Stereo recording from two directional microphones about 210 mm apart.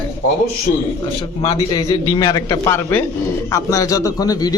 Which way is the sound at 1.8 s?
20° left (ahead or behind).